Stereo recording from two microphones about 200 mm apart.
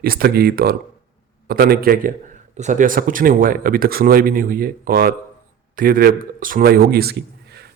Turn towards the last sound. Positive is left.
turn(degrees=-55)  # may be behind; listen again after turning